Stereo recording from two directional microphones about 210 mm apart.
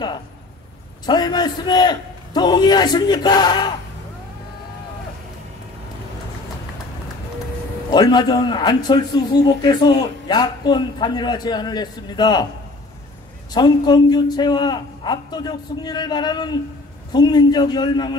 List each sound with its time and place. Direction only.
1.0 s a man's voice: 20° left (ahead or behind)
7.9 s a man's voice: 20° left (ahead or behind)
13.5 s a man's voice: 20° left (ahead or behind)